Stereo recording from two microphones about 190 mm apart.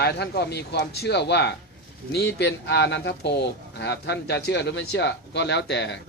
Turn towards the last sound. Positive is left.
turn(degrees=65)  # may be behind; listen again after turning